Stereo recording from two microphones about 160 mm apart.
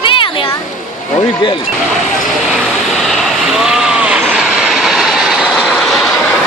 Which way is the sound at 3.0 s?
Centre (ahead or behind).